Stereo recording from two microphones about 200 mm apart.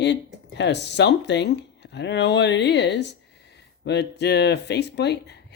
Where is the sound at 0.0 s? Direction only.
60° left (ahead or behind).